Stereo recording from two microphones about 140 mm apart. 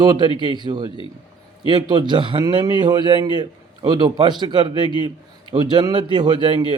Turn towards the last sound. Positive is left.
turn(degrees=-35)  # may be behind; listen again after turning